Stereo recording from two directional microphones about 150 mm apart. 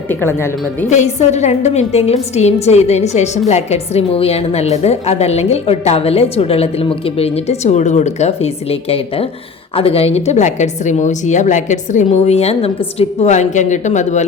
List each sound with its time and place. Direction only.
0.1 s a woman's voice: 15° left (ahead or behind)
0.9 s a woman's voice: 50° left (ahead or behind)